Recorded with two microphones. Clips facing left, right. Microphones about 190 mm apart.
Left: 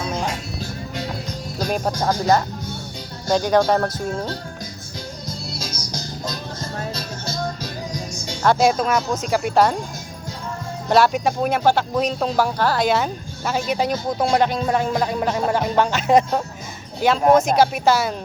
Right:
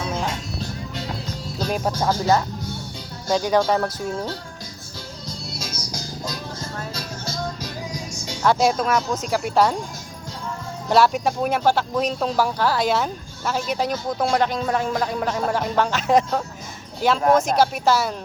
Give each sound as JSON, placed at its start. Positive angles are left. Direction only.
{"t": 0.1, "sound": "music", "side_deg": -5}
{"t": 1.9, "sound": "speech", "side_deg": 15}
{"t": 3.2, "sound": "speech", "side_deg": -5}
{"t": 5.5, "sound": "music", "side_deg": 0}
{"t": 8.2, "sound": "speech", "side_deg": 0}
{"t": 10.8, "sound": "speech", "side_deg": -5}
{"t": 13.9, "sound": "speech", "side_deg": 15}
{"t": 14.3, "sound": "speech", "side_deg": 0}